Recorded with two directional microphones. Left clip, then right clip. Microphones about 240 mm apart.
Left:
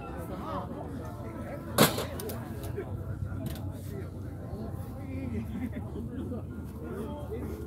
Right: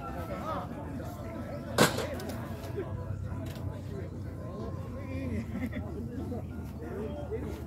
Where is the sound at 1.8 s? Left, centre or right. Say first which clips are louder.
Left 1 dB; left.